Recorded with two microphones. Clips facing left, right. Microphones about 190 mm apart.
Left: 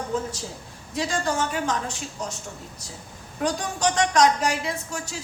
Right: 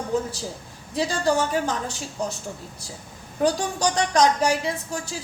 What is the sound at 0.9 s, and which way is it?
A woman's voice, 35° right (ahead or behind).